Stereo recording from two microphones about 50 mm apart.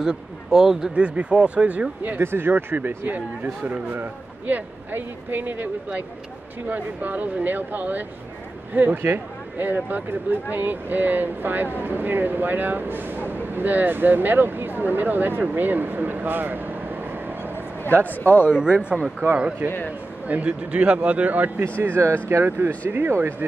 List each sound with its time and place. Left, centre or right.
0.0 s speech: centre
0.9 s speech: right
2.1 s speech: right
3.6 s a man's voice: right
18.2 s speech: left
18.5 s speech: centre
19.2 s a man's voice: right
20.2 s speech: right
21.7 s speech: right
22.3 s speech: right
22.8 s a man's voice: right